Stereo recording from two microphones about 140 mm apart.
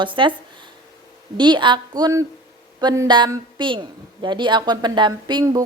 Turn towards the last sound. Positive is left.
turn(degrees=-35)  # may be behind; listen again after turning